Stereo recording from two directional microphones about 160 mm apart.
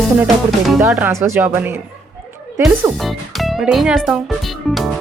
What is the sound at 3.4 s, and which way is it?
Speech, centre (ahead or behind).